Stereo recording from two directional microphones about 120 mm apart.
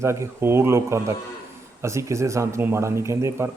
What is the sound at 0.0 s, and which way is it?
A man's voice, 20° right (ahead or behind).